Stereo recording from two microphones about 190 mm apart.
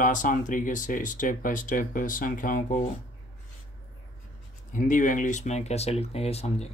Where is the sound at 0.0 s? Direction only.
45° left (ahead or behind).